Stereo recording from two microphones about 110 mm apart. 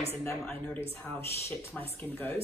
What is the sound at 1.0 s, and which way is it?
A woman's voice, 15° left (ahead or behind).